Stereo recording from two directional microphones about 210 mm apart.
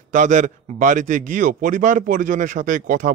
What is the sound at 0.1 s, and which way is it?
Speech, 35° right (ahead or behind).